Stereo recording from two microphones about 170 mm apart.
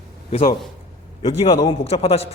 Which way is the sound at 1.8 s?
35° left (ahead or behind).